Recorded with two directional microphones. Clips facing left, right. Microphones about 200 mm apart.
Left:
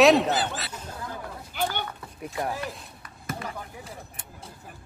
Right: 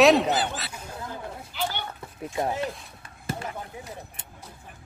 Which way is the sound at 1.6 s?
50° left (ahead or behind).